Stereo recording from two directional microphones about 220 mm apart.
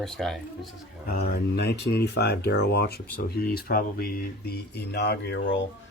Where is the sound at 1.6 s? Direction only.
50° left (ahead or behind).